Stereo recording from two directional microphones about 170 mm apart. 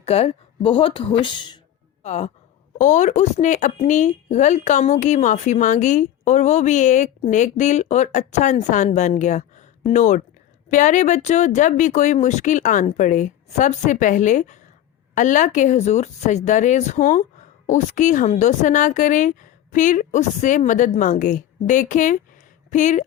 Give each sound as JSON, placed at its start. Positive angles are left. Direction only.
{"t": 0.0, "sound": "speech", "side_deg": 35}
{"t": 2.0, "sound": "speech", "side_deg": 40}